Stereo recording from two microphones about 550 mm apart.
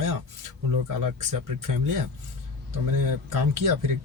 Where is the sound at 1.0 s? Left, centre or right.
Right.